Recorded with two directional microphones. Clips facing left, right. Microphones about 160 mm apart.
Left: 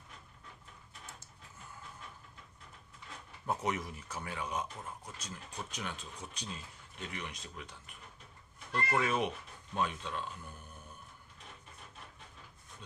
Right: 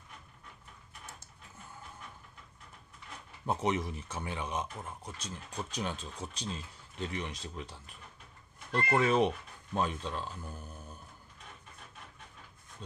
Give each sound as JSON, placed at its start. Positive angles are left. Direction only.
{"t": 3.4, "sound": "speech", "side_deg": -25}